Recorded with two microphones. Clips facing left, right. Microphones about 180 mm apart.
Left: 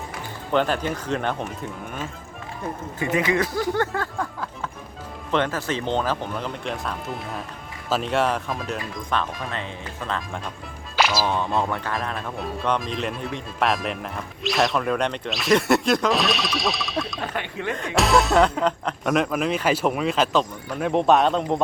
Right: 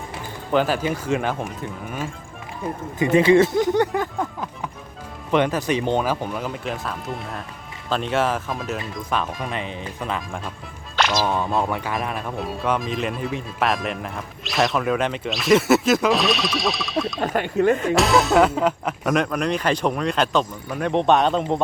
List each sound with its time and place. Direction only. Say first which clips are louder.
0.5 s speech: right 2 dB; 5° right (ahead or behind)
3.0 s speech: right 8 dB; 30° right (ahead or behind)
10.2 s speech: right 1 dB; 5° right (ahead or behind)
17.3 s speech: right 12 dB; 45° right (ahead or behind)
17.7 s speech: right 2 dB; centre (ahead or behind)